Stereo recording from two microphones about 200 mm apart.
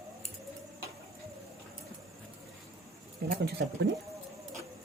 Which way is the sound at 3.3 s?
55° right (ahead or behind).